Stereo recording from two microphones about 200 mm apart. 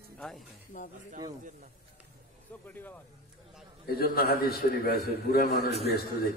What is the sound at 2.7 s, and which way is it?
Speech, 10° left (ahead or behind).